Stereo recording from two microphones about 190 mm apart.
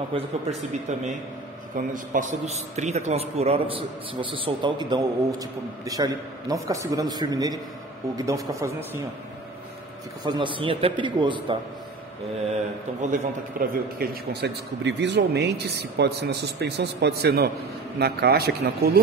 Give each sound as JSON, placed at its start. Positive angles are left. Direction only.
{"t": 0.1, "sound": "a man's voice", "side_deg": -30}
{"t": 1.8, "sound": "a man's voice", "side_deg": -45}
{"t": 10.2, "sound": "a man's voice", "side_deg": -25}
{"t": 13.1, "sound": "speech", "side_deg": -50}